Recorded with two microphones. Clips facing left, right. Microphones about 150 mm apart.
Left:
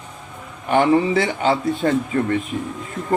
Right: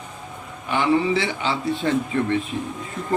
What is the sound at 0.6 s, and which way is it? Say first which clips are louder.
Speech: left 4 dB; 50° left (ahead or behind).